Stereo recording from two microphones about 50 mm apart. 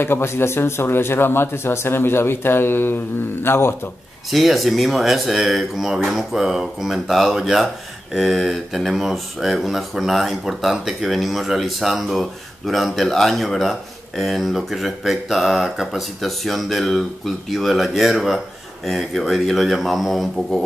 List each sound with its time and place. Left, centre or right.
0.0 s speech: left
4.3 s speech: centre